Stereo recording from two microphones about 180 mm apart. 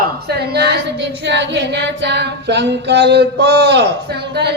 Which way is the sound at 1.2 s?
75° right (ahead or behind).